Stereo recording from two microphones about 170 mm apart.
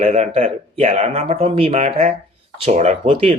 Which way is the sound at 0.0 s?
40° right (ahead or behind).